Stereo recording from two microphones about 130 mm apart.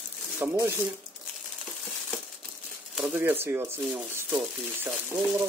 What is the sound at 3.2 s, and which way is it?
Speech, 15° right (ahead or behind).